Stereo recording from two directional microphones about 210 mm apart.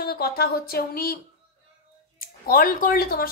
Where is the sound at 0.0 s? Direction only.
50° left (ahead or behind).